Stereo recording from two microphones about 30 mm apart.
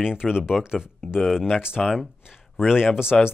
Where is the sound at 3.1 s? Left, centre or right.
Left.